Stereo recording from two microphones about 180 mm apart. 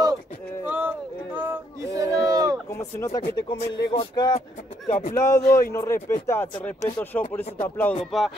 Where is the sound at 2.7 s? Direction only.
15° left (ahead or behind).